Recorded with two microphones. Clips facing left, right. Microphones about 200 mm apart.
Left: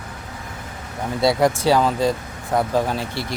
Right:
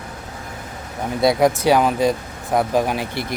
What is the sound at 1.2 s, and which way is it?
Speech, 20° right (ahead or behind).